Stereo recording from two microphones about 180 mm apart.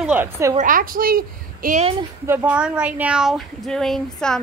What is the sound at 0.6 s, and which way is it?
A woman's voice, 50° right (ahead or behind).